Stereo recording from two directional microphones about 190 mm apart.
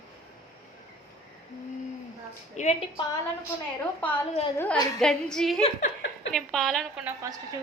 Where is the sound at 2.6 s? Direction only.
40° left (ahead or behind).